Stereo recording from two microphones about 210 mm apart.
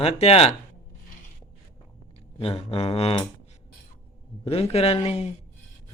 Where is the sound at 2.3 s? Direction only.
25° left (ahead or behind).